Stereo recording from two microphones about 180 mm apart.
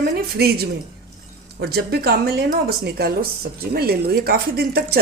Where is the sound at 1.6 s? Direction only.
60° right (ahead or behind).